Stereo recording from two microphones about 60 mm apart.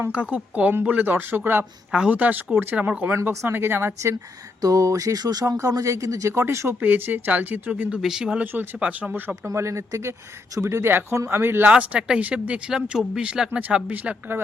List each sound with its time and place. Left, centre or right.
0.1 s speech: right
1.9 s speech: centre
2.1 s speech: right
4.6 s speech: right
6.3 s speech: right
6.8 s speech: right
8.0 s speech: centre
8.4 s speech: right
9.6 s speech: right
11.7 s speech: centre
13.5 s speech: right